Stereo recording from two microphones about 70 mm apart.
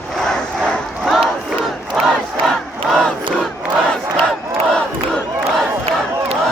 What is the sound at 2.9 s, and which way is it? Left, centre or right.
Crowd, centre.